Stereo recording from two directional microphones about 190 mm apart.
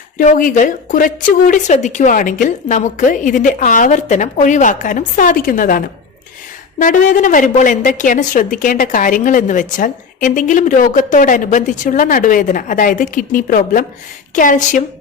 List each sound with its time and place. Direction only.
0.2 s a woman's voice: 45° left (ahead or behind)